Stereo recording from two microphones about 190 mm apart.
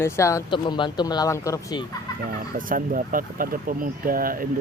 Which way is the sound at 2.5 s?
45° right (ahead or behind).